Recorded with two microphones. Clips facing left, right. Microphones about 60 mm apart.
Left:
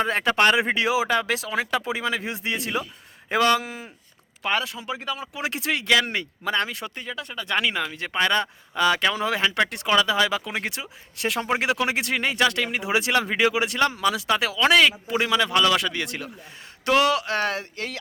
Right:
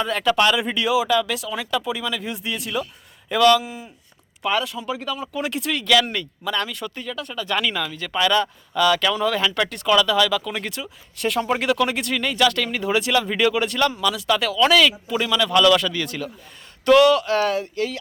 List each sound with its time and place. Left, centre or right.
0.0 s speech: left
4.8 s a man's voice: left
12.5 s speech: centre
13.0 s a man's voice: left